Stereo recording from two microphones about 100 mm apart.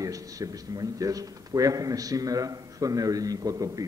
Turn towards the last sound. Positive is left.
turn(degrees=-35)  # may be behind; listen again after turning